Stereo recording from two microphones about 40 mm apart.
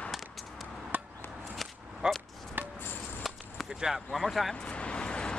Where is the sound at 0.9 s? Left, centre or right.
Right.